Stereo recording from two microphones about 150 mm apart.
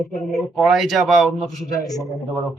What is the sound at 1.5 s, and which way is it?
Speech, 25° left (ahead or behind).